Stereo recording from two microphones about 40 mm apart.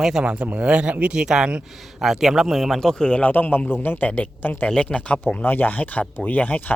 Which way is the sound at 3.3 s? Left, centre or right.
Left.